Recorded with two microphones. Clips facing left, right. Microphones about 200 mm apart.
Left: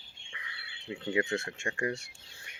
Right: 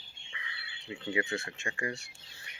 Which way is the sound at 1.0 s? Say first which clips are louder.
Left 3 dB; 45° left (ahead or behind).